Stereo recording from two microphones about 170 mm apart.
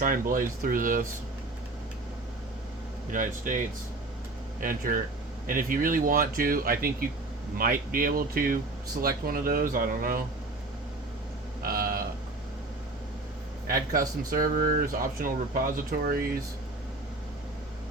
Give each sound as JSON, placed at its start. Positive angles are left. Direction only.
{"t": 0.0, "sound": "speech", "side_deg": -55}
{"t": 3.1, "sound": "speech", "side_deg": -50}
{"t": 4.6, "sound": "speech", "side_deg": -55}
{"t": 11.6, "sound": "a sound", "side_deg": -60}
{"t": 13.7, "sound": "speech", "side_deg": -60}